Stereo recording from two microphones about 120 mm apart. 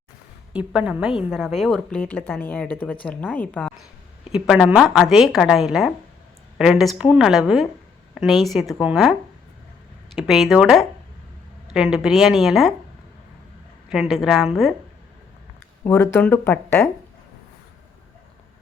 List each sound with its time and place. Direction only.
0.5 s a woman's voice: 10° right (ahead or behind); by 3.8 s 10° left (ahead or behind)
4.3 s a woman's voice: 5° right (ahead or behind)
10.2 s a woman's voice: centre (ahead or behind)
13.9 s a woman's voice: centre (ahead or behind)
15.8 s speech: 20° left (ahead or behind)